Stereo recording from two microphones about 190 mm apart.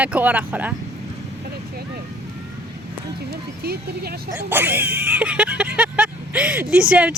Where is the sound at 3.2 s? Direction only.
55° right (ahead or behind).